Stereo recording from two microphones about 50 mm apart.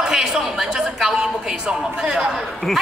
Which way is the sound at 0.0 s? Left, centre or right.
Centre.